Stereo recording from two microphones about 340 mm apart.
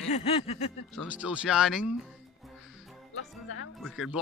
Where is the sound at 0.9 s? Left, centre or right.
Centre.